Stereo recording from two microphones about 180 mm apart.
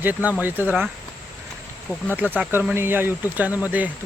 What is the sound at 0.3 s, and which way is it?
Speech, 10° right (ahead or behind).